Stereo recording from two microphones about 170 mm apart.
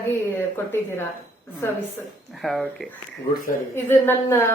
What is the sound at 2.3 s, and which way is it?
A woman's voice, centre (ahead or behind).